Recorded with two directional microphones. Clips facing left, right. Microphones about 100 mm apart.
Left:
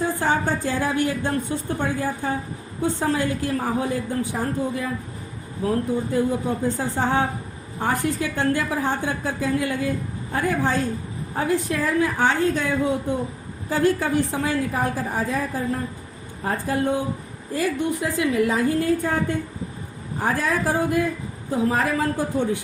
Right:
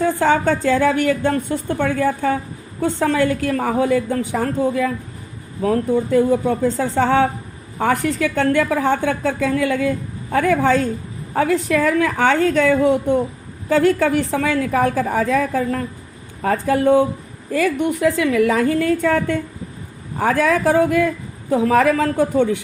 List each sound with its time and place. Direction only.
0.0 s a woman's voice: 85° right
2.8 s a woman's voice: 75° right (ahead or behind)
13.7 s a woman's voice: 90° right; by 22.5 s 75° right (ahead or behind)